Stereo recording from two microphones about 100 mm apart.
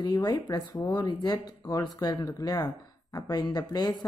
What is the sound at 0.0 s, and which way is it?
A woman's voice, 40° left (ahead or behind).